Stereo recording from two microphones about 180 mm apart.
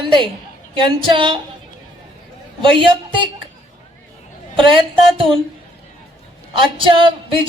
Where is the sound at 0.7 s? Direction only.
30° right (ahead or behind).